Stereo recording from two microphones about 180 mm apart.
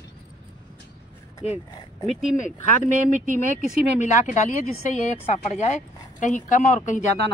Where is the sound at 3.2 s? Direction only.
45° right (ahead or behind).